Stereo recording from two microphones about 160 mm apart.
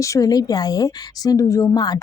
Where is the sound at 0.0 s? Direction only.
20° left (ahead or behind).